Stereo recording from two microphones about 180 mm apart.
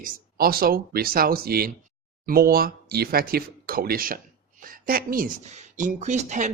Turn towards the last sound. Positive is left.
turn(degrees=-45)  # may be behind; listen again after turning